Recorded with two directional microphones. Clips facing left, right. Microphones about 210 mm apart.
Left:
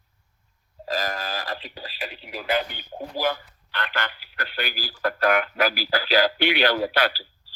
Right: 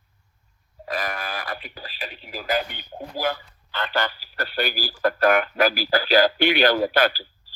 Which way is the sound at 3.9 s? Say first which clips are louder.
Right 5 dB; 35° right (ahead or behind).